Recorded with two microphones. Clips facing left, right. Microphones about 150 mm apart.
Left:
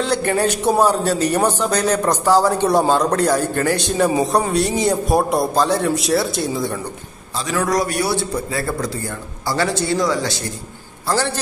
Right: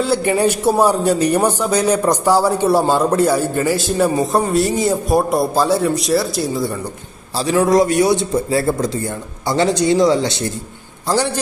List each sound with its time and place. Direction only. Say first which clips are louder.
0.0 s a man's voice: right 3 dB; 10° right (ahead or behind)
7.3 s a man's voice: right 6 dB; 30° right (ahead or behind)